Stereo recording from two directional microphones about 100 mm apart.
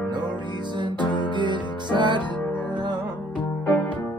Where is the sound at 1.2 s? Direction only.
50° right (ahead or behind).